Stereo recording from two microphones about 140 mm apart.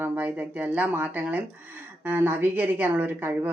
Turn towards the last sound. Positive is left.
turn(degrees=-15)  # may be behind; listen again after turning